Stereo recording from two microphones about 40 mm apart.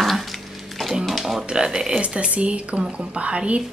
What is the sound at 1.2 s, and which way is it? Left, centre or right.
Speech, centre.